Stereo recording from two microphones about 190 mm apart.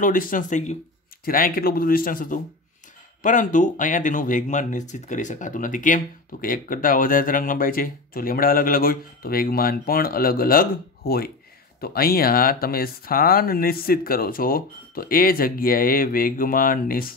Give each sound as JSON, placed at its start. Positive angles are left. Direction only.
{"t": 0.0, "sound": "speech", "side_deg": 45}
{"t": 1.2, "sound": "speech", "side_deg": 50}